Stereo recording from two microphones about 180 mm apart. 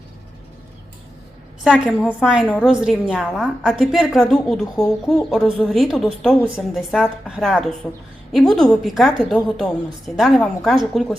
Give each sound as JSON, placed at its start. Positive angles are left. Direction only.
{"t": 1.6, "sound": "a woman's voice", "side_deg": -5}